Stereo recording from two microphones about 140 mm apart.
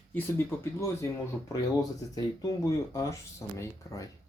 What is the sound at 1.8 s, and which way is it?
Speech, 25° left (ahead or behind).